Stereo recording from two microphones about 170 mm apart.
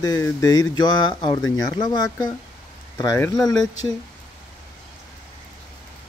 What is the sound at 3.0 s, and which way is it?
Speech, 20° left (ahead or behind).